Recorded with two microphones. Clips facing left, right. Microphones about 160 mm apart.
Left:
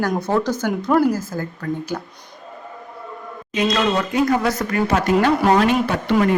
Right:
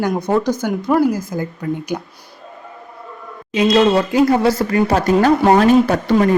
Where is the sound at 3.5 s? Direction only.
30° right (ahead or behind).